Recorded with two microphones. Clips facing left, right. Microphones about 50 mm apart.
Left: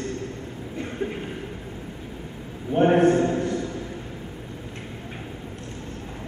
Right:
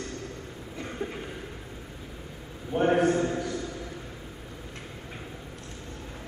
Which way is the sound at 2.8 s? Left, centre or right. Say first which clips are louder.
Left 5 dB; left.